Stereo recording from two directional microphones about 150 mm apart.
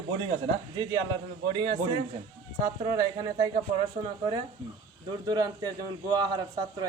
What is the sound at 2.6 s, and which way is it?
Speech, 25° right (ahead or behind).